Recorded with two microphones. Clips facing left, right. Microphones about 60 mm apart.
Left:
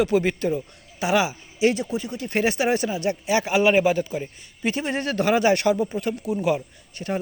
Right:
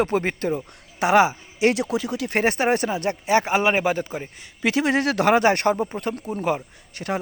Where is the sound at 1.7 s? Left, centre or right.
Right.